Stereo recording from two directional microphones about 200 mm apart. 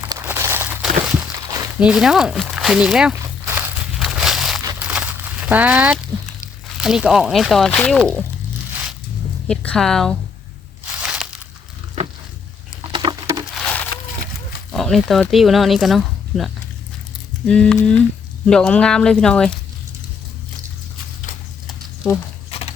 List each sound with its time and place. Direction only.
0.1 s a sound: 15° right (ahead or behind)
4.6 s crumpling: 15° right (ahead or behind)
6.7 s speech: 5° right (ahead or behind)
9.5 s speech: 5° left (ahead or behind)
10.9 s a sound: 5° right (ahead or behind)
12.8 s patter: 25° right (ahead or behind)
14.7 s speech: centre (ahead or behind)